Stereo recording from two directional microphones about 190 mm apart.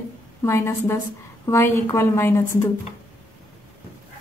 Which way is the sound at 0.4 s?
15° left (ahead or behind).